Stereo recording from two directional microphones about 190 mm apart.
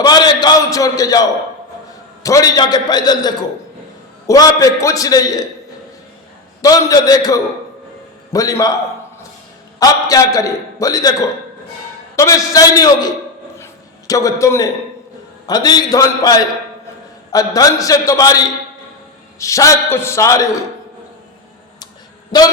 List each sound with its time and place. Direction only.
0.0 s a man's voice: 20° left (ahead or behind)
6.6 s a man's voice: 20° left (ahead or behind)
9.8 s a man's voice: 20° left (ahead or behind)
14.1 s a man's voice: 15° left (ahead or behind)
22.3 s a man's voice: 20° left (ahead or behind)